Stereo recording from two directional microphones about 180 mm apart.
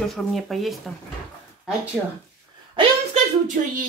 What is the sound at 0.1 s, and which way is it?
Speech, centre (ahead or behind).